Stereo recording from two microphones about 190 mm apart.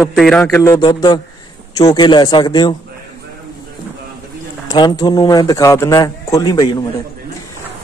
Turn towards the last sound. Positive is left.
turn(degrees=20)  # may be behind; listen again after turning